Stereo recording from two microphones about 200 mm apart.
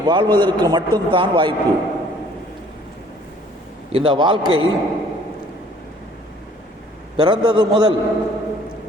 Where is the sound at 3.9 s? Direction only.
25° right (ahead or behind).